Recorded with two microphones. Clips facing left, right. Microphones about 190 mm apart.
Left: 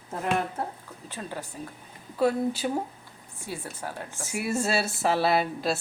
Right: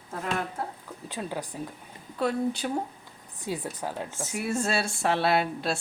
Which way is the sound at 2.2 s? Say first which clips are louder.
Left 3 dB; 5° left (ahead or behind).